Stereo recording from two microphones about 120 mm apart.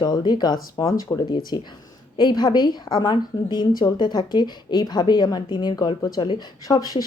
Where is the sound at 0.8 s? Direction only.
25° left (ahead or behind).